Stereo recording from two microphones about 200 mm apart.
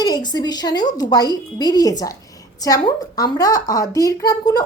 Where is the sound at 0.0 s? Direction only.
20° left (ahead or behind).